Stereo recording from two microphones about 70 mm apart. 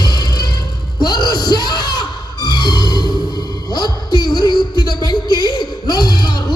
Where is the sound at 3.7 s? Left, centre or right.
Left.